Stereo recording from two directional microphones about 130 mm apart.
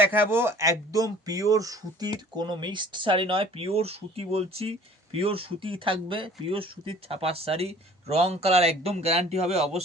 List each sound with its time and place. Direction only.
0.0 s speech: 15° right (ahead or behind); by 9.8 s 55° right (ahead or behind)